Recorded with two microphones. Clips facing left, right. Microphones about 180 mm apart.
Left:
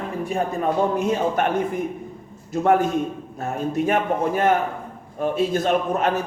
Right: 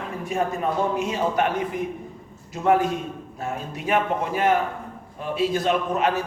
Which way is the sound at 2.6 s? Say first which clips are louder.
Left 2 dB; 50° left (ahead or behind).